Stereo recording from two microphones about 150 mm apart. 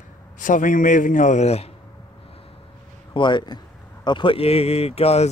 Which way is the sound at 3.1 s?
30° left (ahead or behind).